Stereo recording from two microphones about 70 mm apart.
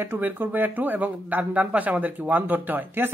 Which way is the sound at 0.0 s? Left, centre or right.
Right.